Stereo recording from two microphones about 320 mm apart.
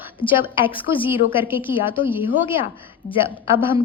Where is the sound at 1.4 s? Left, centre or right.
Centre.